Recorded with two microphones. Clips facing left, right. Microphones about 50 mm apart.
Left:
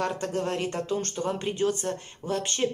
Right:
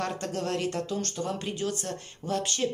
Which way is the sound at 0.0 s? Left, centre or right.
Centre.